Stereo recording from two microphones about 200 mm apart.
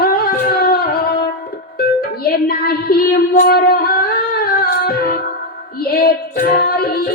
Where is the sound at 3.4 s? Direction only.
50° left (ahead or behind).